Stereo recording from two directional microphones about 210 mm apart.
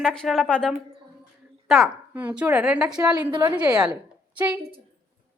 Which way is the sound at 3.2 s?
15° right (ahead or behind).